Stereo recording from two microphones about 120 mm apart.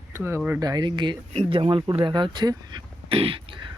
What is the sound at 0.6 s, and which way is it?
Speech, 35° right (ahead or behind).